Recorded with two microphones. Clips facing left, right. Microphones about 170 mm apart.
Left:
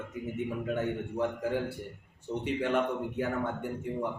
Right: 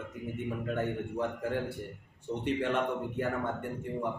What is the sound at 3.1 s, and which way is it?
Speech, centre (ahead or behind).